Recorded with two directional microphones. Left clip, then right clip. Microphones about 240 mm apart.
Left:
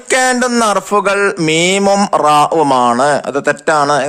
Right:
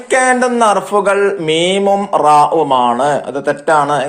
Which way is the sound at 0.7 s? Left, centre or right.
Left.